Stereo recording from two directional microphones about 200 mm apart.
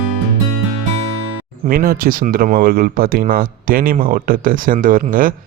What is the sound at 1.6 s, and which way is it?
Speech, 45° right (ahead or behind).